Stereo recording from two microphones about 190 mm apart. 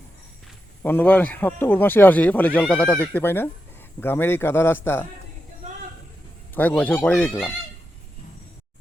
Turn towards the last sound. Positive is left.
turn(degrees=5)  # may be behind; listen again after turning